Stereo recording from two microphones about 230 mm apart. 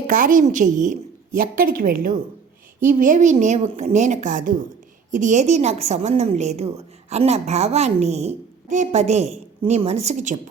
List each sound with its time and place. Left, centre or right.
0.1 s a woman's voice: right